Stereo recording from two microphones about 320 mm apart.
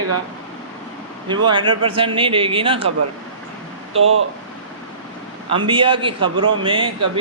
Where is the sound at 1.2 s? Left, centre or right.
Centre.